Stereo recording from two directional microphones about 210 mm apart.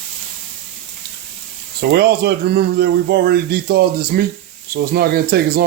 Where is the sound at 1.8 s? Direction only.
50° right (ahead or behind).